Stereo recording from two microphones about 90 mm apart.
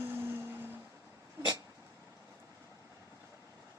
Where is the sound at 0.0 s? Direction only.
25° right (ahead or behind).